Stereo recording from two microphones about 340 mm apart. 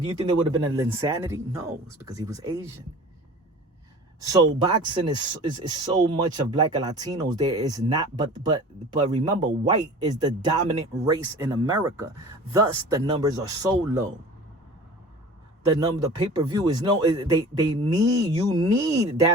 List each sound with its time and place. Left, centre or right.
0.0 s speech: centre
4.3 s speech: centre
15.7 s speech: centre